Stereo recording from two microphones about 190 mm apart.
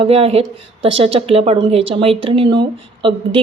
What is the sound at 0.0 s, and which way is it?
Speech, 30° right (ahead or behind).